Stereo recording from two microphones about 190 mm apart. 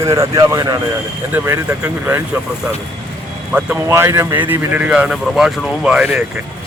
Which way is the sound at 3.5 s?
10° right (ahead or behind).